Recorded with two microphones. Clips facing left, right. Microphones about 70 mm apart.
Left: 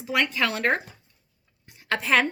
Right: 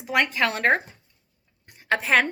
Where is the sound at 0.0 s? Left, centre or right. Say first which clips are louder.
Right 2 dB; right.